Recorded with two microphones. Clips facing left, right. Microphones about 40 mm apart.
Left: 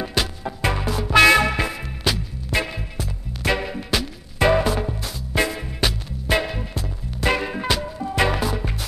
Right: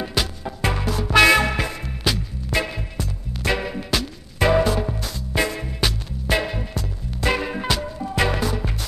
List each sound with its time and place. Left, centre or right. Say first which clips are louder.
0.0 s music: left 1 dB; centre
1.1 s music: left 1 dB; left
1.4 s music: left 1 dB; centre